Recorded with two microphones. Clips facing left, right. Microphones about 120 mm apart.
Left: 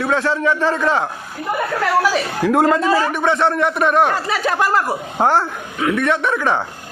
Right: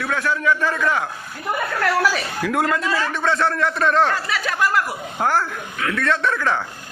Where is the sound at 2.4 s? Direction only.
30° left (ahead or behind).